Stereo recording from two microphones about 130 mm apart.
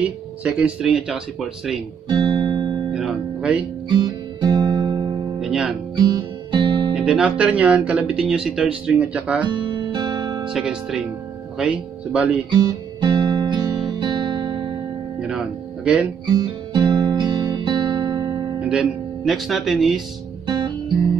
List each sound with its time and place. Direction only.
0.4 s speech: 10° right (ahead or behind)
2.1 s guitar: 35° right (ahead or behind)
2.9 s music: 5° right (ahead or behind)
3.9 s guitar: 30° right (ahead or behind)
5.4 s music: 10° right (ahead or behind)
5.9 s music: 30° right (ahead or behind)
7.0 s speech: 10° right (ahead or behind)
9.4 s guitar: 35° right (ahead or behind)
10.5 s speech: 5° right (ahead or behind)
12.4 s guitar: 35° right (ahead or behind)
15.2 s music: 10° right (ahead or behind)
16.7 s music: 35° right (ahead or behind)
18.6 s speech: 5° right (ahead or behind)
20.4 s guitar: 35° right (ahead or behind)